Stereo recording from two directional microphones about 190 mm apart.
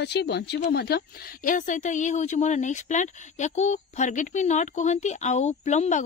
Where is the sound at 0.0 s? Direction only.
60° left (ahead or behind).